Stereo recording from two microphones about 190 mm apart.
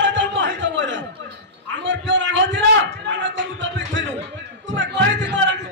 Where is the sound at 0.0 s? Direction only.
70° right (ahead or behind).